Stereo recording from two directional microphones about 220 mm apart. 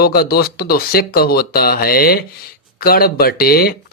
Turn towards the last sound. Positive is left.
turn(degrees=45)  # may be behind; listen again after turning